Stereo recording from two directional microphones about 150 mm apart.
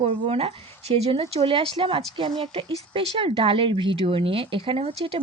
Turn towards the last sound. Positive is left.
turn(degrees=-35)  # may be behind; listen again after turning